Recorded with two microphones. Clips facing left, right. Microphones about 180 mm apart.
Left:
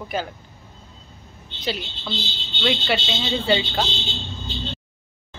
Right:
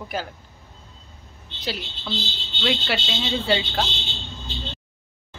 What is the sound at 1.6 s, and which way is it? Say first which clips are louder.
A woman's voice: left 2 dB; centre (ahead or behind).